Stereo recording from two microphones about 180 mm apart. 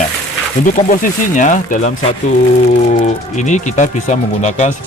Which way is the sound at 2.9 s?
40° left (ahead or behind).